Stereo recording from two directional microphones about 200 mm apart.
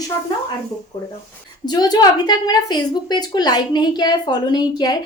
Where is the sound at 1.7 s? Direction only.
20° left (ahead or behind).